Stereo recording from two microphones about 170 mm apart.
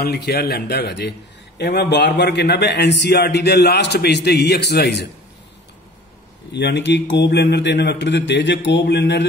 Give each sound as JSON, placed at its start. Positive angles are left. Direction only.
{"t": 0.0, "sound": "a man's voice", "side_deg": 70}
{"t": 6.5, "sound": "speech", "side_deg": 90}